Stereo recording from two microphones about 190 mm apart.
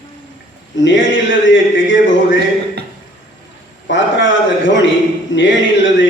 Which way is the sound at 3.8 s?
80° left.